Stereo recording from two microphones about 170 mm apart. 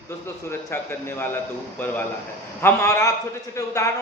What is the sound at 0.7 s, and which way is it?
A man's voice, 15° left (ahead or behind).